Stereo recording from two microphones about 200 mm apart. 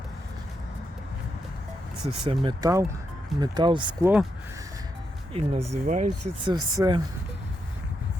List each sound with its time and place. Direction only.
2.2 s speech: 25° right (ahead or behind)
4.0 s speech: 5° right (ahead or behind)
5.3 s speech: 30° right (ahead or behind)
6.4 s speech: 20° right (ahead or behind)